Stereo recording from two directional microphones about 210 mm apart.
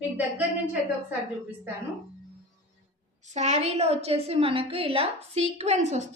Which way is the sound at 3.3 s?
30° right (ahead or behind).